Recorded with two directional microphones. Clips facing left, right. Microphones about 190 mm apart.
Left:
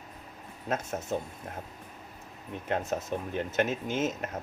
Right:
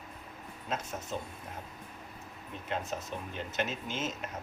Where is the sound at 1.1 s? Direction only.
50° left (ahead or behind).